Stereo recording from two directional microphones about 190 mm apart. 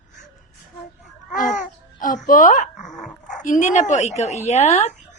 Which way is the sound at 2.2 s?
45° left (ahead or behind).